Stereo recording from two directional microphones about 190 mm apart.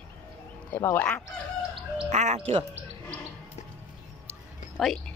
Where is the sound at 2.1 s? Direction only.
35° right (ahead or behind).